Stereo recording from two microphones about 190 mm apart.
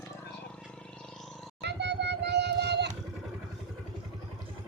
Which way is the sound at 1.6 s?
65° right (ahead or behind).